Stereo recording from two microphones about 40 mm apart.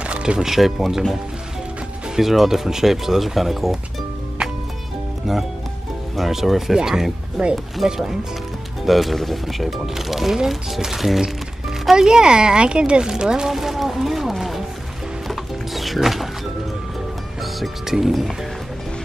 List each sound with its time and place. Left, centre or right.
0.0 s a sound: right
0.4 s speech: centre
2.1 s speech: centre
6.1 s speech: centre
15.2 s mechanisms: centre
17.4 s music: centre
17.9 s speech: centre